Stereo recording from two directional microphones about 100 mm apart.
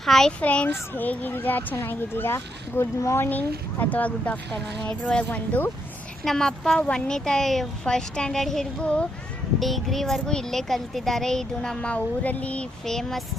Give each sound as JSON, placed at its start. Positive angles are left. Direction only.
{"t": 0.0, "sound": "a child's voice", "side_deg": 5}